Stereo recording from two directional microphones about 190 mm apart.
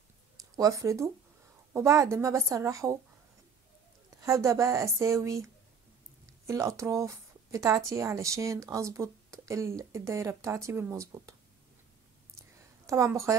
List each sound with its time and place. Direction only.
0.4 s speech: 20° right (ahead or behind)
4.2 s speech: 15° right (ahead or behind)
12.4 s a sound: 15° right (ahead or behind)